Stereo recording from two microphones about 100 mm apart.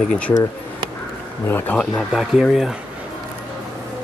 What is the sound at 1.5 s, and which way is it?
Speech, 20° left (ahead or behind).